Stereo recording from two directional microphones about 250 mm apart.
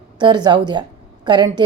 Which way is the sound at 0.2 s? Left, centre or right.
Centre.